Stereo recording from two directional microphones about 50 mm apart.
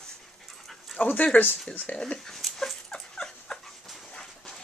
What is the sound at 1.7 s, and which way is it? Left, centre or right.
Speech, left.